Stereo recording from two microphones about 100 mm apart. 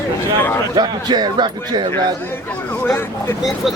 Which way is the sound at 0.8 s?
45° right (ahead or behind).